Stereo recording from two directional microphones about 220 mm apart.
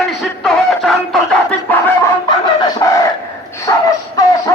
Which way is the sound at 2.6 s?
15° left (ahead or behind).